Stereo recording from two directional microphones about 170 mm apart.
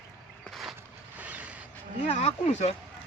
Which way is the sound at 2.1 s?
40° left (ahead or behind).